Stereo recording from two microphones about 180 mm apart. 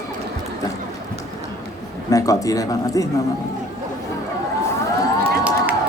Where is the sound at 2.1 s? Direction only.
20° left (ahead or behind).